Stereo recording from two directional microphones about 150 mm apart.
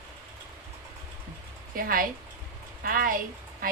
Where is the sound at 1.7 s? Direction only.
70° right (ahead or behind).